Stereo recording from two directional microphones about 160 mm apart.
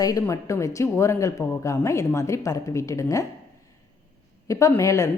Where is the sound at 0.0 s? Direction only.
20° left (ahead or behind).